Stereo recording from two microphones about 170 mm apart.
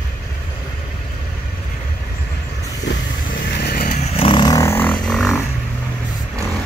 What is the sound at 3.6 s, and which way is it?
Vehicle, 60° left (ahead or behind).